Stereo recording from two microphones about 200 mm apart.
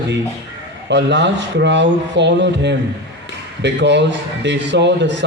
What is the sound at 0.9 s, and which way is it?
A man's voice, 60° right (ahead or behind).